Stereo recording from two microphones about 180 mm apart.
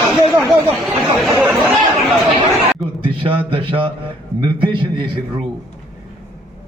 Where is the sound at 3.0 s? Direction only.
30° right (ahead or behind).